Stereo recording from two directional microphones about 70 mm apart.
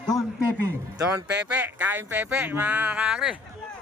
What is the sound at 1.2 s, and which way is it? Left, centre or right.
Speech, centre.